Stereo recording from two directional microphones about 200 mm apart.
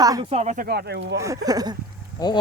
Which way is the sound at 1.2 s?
15° right (ahead or behind).